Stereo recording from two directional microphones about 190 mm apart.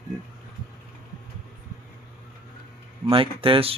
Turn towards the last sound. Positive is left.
turn(degrees=-30)  # may be behind; listen again after turning